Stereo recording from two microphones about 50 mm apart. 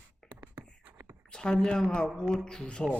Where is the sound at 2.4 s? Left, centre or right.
Centre.